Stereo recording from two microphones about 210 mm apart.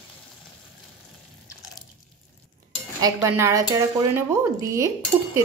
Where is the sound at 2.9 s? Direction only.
15° right (ahead or behind).